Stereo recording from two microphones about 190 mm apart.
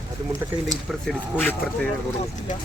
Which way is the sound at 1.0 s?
10° left (ahead or behind).